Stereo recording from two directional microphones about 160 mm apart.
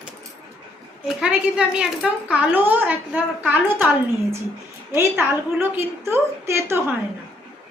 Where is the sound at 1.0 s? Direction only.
5° right (ahead or behind).